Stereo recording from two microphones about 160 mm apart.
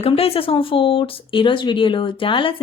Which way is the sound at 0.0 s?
35° left (ahead or behind).